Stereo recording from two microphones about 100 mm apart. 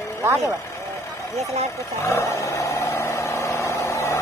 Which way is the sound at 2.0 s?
30° left (ahead or behind).